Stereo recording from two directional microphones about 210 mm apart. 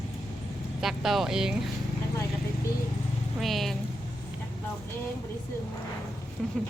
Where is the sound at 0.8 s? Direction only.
Centre (ahead or behind).